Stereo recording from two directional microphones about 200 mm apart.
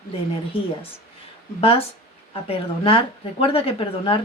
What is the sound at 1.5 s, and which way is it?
Speech, 30° left (ahead or behind).